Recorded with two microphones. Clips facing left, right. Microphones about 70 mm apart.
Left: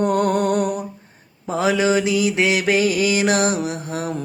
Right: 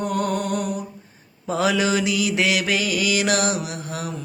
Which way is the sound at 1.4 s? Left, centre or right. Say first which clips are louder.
Left 2 dB; left.